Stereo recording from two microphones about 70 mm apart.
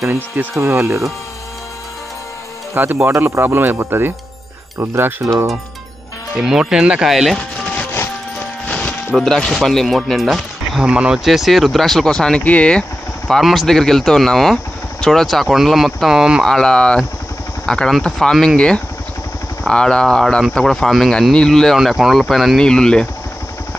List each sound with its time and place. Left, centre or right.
0.6 s speech: right
2.7 s speech: right
6.3 s speech: centre
7.1 s speech: centre
8.6 s music: centre
9.1 s speech: centre
10.9 s speech: centre
11.2 s speech: centre
12.4 s speech: centre
13.3 s speech: centre
16.4 s speech: centre
19.7 s speech: centre
21.7 s speech: centre
22.6 s speech: centre